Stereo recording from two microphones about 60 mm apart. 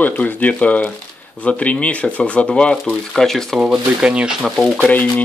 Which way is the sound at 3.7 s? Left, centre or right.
Centre.